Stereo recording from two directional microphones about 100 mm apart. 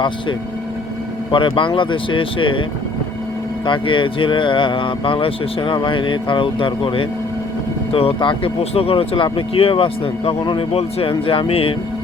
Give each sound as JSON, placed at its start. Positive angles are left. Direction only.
{"t": 1.3, "sound": "speech", "side_deg": 55}
{"t": 3.7, "sound": "speech", "side_deg": 55}
{"t": 10.7, "sound": "speech", "side_deg": 80}